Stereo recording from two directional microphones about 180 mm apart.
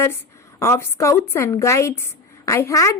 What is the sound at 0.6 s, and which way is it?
A woman's voice, 15° left (ahead or behind).